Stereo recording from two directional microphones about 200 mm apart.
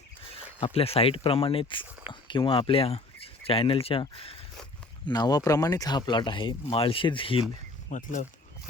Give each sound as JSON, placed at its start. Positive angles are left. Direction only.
{"t": 0.6, "sound": "speech", "side_deg": 30}
{"t": 7.9, "sound": "speech", "side_deg": 40}